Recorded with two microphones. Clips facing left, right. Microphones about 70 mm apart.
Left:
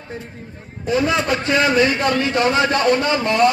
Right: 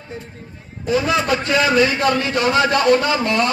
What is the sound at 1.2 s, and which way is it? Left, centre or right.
Speech, centre.